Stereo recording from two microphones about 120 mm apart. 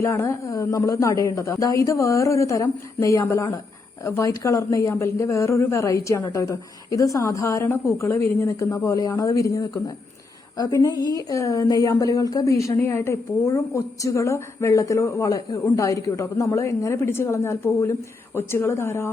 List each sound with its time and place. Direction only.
0.0 s a woman's voice: 25° left (ahead or behind)